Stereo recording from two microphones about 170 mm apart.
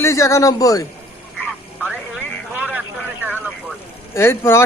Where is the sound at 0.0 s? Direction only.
15° left (ahead or behind).